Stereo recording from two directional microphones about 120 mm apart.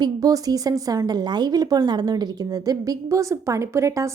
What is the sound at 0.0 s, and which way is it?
Speech, 30° right (ahead or behind).